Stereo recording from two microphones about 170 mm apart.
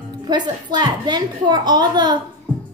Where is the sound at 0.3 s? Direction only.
25° right (ahead or behind).